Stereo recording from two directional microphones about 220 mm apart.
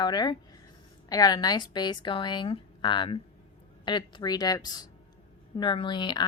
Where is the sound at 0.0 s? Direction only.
20° left (ahead or behind).